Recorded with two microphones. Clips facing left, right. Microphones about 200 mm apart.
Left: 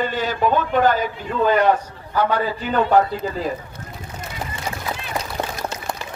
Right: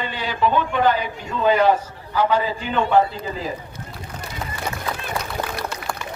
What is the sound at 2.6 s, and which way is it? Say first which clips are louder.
Speech: left 3 dB; 40° left (ahead or behind).